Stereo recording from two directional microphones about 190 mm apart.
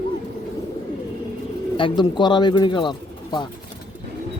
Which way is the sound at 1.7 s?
25° left (ahead or behind).